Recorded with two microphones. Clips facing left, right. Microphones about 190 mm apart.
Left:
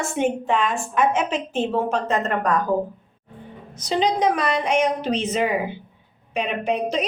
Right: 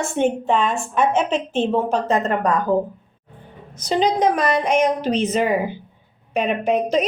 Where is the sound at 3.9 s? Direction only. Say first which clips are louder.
Right 2 dB; 45° right (ahead or behind).